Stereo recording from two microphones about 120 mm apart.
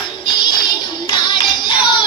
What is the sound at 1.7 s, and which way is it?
Music, 40° left (ahead or behind).